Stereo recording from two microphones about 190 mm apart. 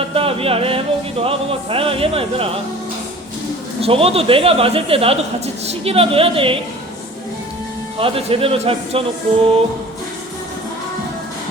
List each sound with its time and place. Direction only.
0.1 s music: 30° right (ahead or behind)
3.8 s speech: 30° right (ahead or behind)
7.9 s speech: 30° right (ahead or behind)